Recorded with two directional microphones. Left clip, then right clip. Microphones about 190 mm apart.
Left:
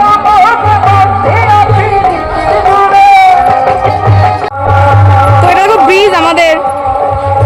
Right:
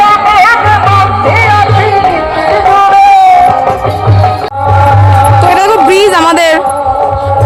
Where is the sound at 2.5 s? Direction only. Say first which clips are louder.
Even; 45° right (ahead or behind).